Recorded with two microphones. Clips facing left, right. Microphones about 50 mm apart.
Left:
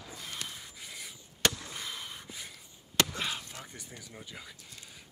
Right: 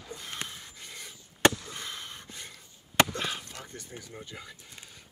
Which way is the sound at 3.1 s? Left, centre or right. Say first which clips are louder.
Right 2 dB; centre.